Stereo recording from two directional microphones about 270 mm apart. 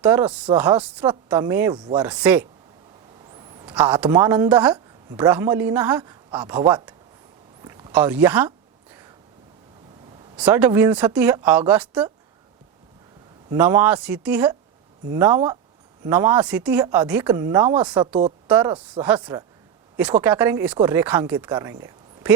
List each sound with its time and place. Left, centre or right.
0.0 s speech: centre
2.0 s speech: centre
3.3 s a sound: centre
3.8 s speech: centre
7.6 s a sound: centre
10.3 s speech: centre
13.5 s speech: centre